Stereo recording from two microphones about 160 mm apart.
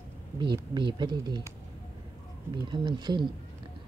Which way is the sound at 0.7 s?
30° right (ahead or behind).